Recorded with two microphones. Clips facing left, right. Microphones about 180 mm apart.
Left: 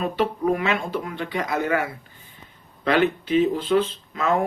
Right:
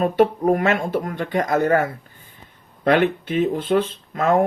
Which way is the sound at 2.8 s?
55° right (ahead or behind).